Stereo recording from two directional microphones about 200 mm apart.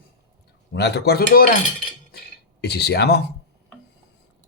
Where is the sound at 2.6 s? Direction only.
55° left (ahead or behind).